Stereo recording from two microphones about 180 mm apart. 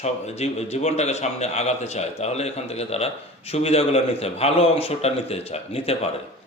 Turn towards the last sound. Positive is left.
turn(degrees=35)  # may be behind; listen again after turning